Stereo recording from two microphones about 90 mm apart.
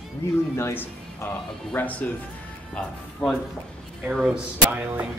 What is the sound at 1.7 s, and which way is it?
Speech, 15° left (ahead or behind).